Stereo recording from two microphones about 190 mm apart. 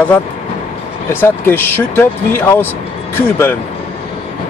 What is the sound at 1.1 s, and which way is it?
Speech, 10° left (ahead or behind).